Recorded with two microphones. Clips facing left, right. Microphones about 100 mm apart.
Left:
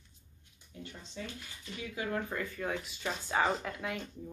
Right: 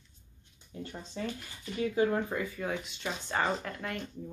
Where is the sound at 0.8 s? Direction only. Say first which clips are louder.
Right 5 dB; 40° right (ahead or behind).